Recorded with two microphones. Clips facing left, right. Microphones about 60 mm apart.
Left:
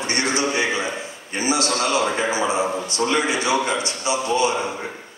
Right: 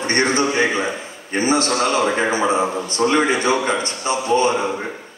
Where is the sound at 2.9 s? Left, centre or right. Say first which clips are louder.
Right 4 dB; right.